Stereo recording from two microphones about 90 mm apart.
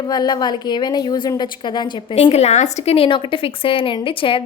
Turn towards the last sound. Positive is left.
turn(degrees=75)  # may be behind; listen again after turning